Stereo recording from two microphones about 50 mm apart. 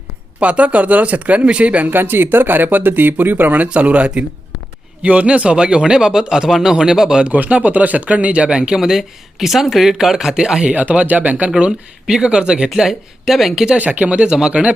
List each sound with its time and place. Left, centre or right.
0.3 s speech: right
1.9 s speech: right; by 7.2 s centre
7.2 s speech: right; by 10.6 s centre
10.6 s speech: right
11.5 s speech: centre
13.7 s speech: right